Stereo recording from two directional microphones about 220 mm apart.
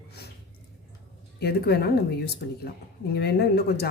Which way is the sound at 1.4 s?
45° left (ahead or behind).